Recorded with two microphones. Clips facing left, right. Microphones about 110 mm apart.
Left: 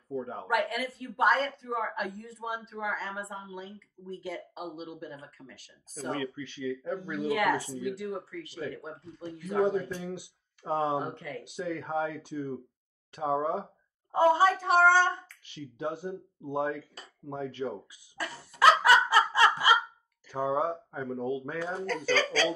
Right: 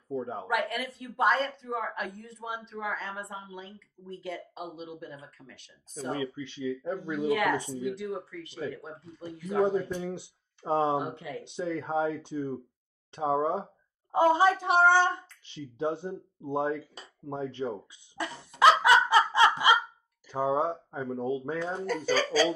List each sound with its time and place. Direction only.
0.1 s speech: 20° right (ahead or behind)
0.5 s speech: centre (ahead or behind)
6.2 s speech: 25° right (ahead or behind)
7.2 s speech: 5° left (ahead or behind)
9.8 s speech: 25° right (ahead or behind)
11.0 s speech: 10° right (ahead or behind)
11.4 s speech: 25° right (ahead or behind)
18.1 s a sound: 20° right (ahead or behind)
20.2 s speech: 20° right (ahead or behind)
21.5 s speech: 5° left (ahead or behind)
21.8 s speech: 10° right (ahead or behind)